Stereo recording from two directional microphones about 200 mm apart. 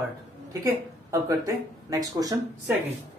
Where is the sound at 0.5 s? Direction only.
15° right (ahead or behind).